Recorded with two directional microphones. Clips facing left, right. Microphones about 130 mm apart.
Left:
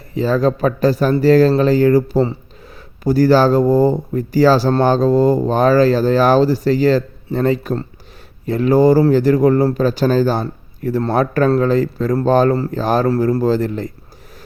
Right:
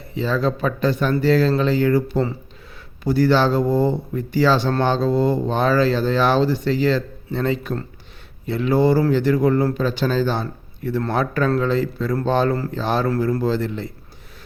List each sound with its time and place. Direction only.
0.1 s speech: 40° left (ahead or behind)